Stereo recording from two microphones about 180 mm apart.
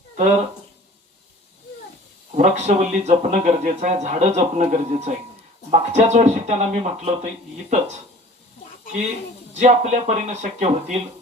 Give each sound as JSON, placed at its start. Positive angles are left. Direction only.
{"t": 2.3, "sound": "speech", "side_deg": -40}
{"t": 9.6, "sound": "speech", "side_deg": -40}